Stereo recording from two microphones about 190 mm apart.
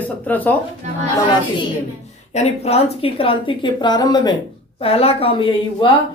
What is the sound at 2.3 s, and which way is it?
A woman's voice, 35° left (ahead or behind).